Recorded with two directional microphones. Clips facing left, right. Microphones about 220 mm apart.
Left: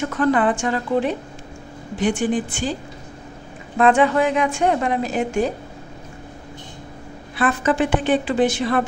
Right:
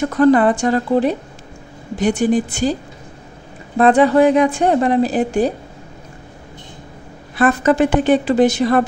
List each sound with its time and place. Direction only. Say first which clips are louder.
0.0 s a woman's voice: right 6 dB; 40° right (ahead or behind)
3.7 s a woman's voice: right 4 dB; 35° right (ahead or behind)
7.3 s a woman's voice: right 5 dB; 40° right (ahead or behind)